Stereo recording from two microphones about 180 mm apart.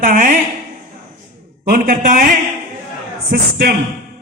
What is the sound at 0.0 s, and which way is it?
Speech, 50° right (ahead or behind).